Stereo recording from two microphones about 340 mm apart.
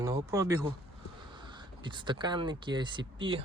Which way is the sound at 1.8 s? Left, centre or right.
Centre.